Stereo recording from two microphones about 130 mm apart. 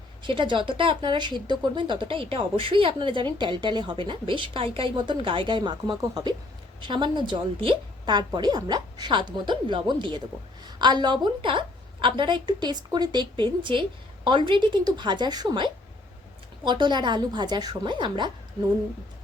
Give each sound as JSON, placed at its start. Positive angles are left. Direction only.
{"t": 0.2, "sound": "speech", "side_deg": -40}